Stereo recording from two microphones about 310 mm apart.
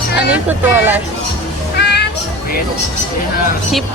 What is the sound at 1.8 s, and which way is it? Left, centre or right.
Music, left.